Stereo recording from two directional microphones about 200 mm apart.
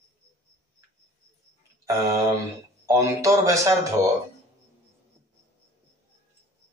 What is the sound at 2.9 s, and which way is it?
Speech, 15° right (ahead or behind).